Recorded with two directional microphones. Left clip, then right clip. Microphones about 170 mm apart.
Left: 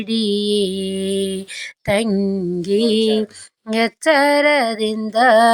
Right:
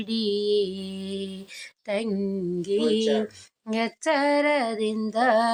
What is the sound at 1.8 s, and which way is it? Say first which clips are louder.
Speech: left 9 dB; 40° left (ahead or behind).